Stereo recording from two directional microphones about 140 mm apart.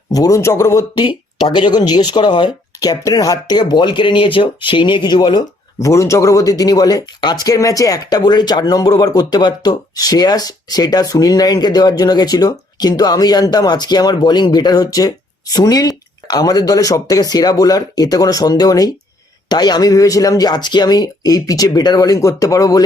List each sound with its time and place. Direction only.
0.1 s speech: 25° left (ahead or behind)
5.8 s speech: 20° left (ahead or behind)